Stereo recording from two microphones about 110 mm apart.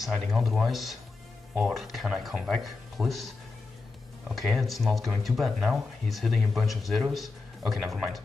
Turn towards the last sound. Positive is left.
turn(degrees=0)  # may be behind; listen again after turning